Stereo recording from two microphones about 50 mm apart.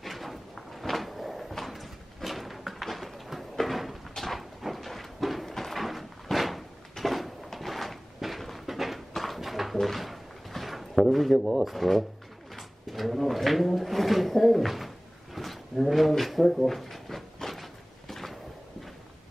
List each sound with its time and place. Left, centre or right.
0.0 s cupboard open or close: centre
4.1 s a sound: centre
12.5 s speech: centre
15.3 s drawer open or close: centre